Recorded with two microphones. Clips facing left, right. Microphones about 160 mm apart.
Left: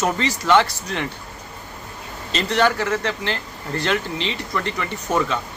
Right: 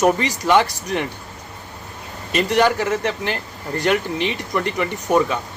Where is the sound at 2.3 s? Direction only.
15° right (ahead or behind).